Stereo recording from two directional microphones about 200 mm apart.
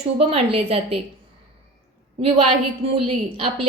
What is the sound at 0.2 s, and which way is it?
Speech, 30° right (ahead or behind).